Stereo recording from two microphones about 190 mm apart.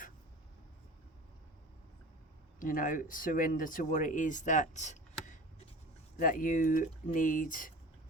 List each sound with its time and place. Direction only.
2.6 s speech: 45° left (ahead or behind)